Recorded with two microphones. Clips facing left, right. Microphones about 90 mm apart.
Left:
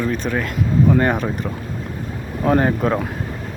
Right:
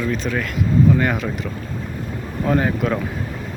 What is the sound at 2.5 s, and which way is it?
Speech, 35° left (ahead or behind).